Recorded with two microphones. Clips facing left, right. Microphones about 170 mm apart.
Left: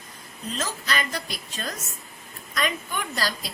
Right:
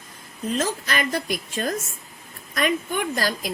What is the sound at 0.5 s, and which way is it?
A woman's voice, 50° right (ahead or behind).